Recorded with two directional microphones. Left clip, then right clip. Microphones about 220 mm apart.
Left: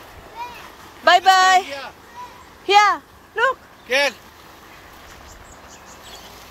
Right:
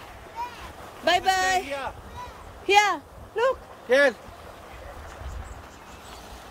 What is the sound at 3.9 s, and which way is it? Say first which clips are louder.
Speech: even; 35° right (ahead or behind).